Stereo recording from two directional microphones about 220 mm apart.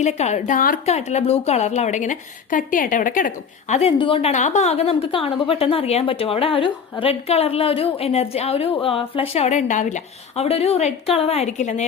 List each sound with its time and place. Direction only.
0.0 s a woman's voice: 30° left (ahead or behind)